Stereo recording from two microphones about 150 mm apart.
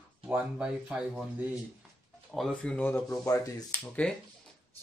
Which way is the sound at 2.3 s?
5° left (ahead or behind).